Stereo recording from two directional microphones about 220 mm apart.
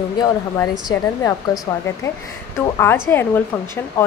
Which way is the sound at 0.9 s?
15° left (ahead or behind).